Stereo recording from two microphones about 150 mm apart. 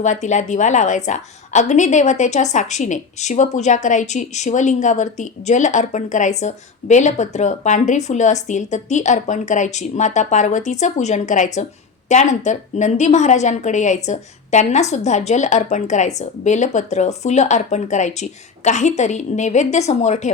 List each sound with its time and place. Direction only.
0.0 s a woman's voice: 55° left (ahead or behind)